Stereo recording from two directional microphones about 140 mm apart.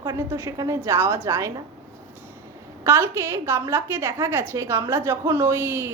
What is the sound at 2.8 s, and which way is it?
A woman's voice, 15° right (ahead or behind).